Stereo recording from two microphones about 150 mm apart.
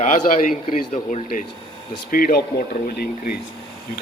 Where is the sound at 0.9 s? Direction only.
40° left (ahead or behind).